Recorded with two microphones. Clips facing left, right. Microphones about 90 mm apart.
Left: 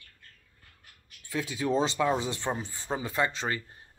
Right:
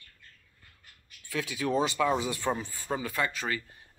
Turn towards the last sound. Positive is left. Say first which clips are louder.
# left 2 dB
turn(degrees=25)  # may be behind; listen again after turning